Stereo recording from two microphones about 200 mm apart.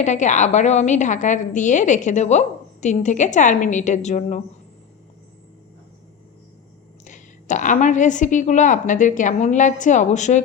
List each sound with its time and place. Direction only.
0.0 s a woman's voice: 35° left (ahead or behind)
7.0 s a woman's voice: 40° left (ahead or behind)